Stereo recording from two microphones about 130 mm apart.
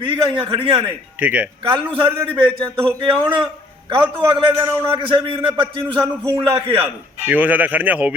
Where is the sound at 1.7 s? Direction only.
40° right (ahead or behind).